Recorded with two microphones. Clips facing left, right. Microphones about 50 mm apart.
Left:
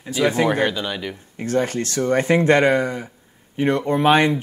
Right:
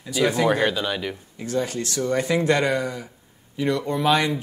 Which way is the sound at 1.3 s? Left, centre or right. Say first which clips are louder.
Left 5 dB; left.